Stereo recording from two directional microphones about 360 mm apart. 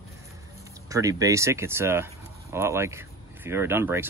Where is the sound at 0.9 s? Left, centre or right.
Centre.